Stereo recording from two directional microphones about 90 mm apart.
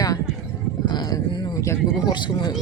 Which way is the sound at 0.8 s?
50° left (ahead or behind).